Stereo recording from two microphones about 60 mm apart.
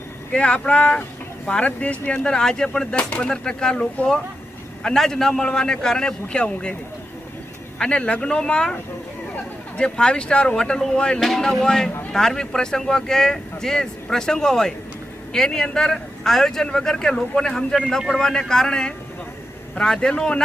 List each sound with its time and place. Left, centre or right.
0.3 s speech: centre
7.8 s speech: centre